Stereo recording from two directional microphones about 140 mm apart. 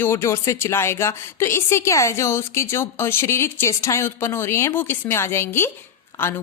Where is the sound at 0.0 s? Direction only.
20° left (ahead or behind).